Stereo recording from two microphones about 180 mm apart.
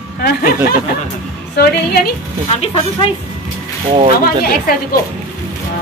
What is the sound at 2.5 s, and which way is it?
Speech, 35° left (ahead or behind).